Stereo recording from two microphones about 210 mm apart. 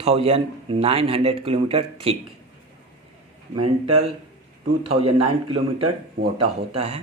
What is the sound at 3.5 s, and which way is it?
A man's voice, 30° right (ahead or behind).